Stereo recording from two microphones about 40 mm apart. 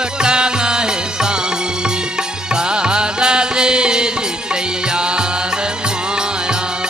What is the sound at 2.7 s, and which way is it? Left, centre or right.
Music, right.